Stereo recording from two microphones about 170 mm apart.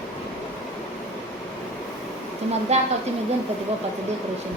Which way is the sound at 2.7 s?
40° right (ahead or behind).